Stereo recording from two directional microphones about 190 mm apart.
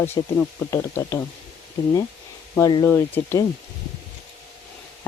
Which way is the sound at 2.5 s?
20° left (ahead or behind).